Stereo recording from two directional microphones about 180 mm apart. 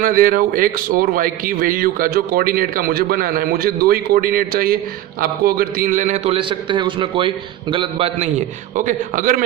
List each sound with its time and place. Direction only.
0.0 s a man's voice: 50° right (ahead or behind)